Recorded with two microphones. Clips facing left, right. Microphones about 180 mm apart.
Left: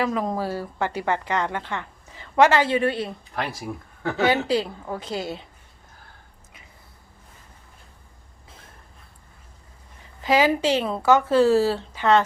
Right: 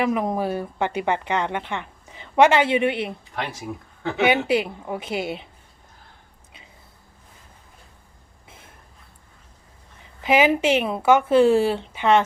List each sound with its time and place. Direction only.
0.0 s a woman's voice: 20° right (ahead or behind)
10.2 s a woman's voice: 20° right (ahead or behind)